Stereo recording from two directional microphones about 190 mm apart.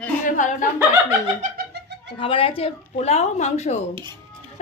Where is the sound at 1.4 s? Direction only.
50° right (ahead or behind).